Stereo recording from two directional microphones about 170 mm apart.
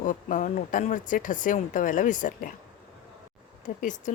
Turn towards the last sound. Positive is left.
turn(degrees=45)  # may be behind; listen again after turning